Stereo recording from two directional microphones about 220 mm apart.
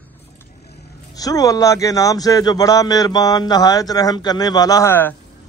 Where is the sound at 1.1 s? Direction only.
15° left (ahead or behind).